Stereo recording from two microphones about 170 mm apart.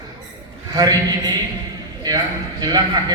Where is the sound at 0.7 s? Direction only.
25° right (ahead or behind).